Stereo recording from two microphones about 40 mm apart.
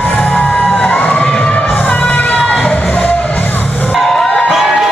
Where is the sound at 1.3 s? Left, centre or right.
Left.